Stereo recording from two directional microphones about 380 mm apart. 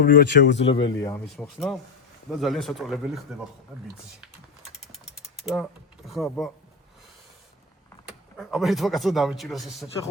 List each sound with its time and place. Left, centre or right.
0.0 s speech: left
0.7 s speech: centre
6.1 s speech: centre
8.4 s speech: centre